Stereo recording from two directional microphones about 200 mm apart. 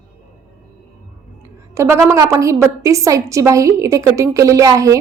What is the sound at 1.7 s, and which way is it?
A woman's voice, 15° right (ahead or behind).